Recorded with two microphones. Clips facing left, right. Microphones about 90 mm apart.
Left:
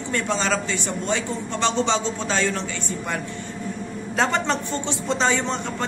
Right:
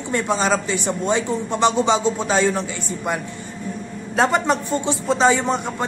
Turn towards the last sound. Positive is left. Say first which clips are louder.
# right 4 dB
turn(degrees=-10)  # may be behind; listen again after turning